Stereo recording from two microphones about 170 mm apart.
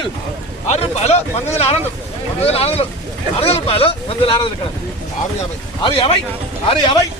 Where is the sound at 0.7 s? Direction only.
40° left (ahead or behind).